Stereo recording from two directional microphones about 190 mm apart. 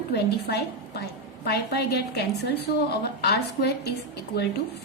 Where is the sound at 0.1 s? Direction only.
60° left (ahead or behind).